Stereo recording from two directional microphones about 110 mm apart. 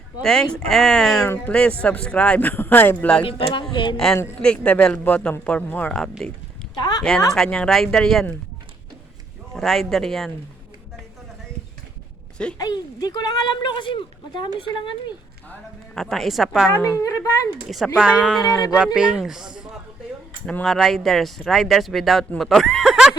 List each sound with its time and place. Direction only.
0.2 s speech: 5° left (ahead or behind)
3.2 s speech: 50° left (ahead or behind)
3.9 s speech: 5° left (ahead or behind)
5.9 s speech: 5° left (ahead or behind)
9.6 s speech: 5° left (ahead or behind)
12.5 s speech: 35° left (ahead or behind)
16.0 s speech: centre (ahead or behind)
16.7 s a woman's voice: 20° left (ahead or behind)
17.0 s speech: 30° left (ahead or behind)
17.7 s speech: centre (ahead or behind)
18.2 s speech: 5° left (ahead or behind)
20.5 s speech: 10° left (ahead or behind)
20.7 s speech: centre (ahead or behind)